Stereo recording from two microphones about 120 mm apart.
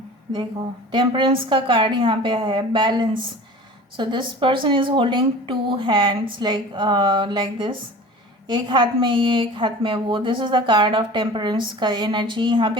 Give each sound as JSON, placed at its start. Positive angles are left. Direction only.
{"t": 0.9, "sound": "a woman's voice", "side_deg": -40}